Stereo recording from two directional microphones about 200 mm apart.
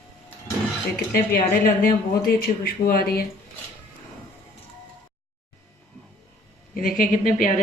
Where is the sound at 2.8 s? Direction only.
50° left (ahead or behind).